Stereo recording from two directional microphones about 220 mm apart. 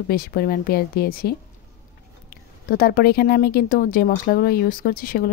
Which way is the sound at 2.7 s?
45° left (ahead or behind).